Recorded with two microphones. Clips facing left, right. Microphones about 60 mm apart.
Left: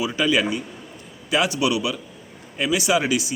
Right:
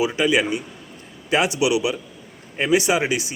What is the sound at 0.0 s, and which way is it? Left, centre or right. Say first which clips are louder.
Speech: right 2 dB; right.